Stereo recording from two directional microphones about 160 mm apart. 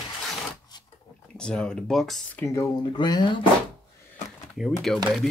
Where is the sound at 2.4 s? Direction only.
15° left (ahead or behind).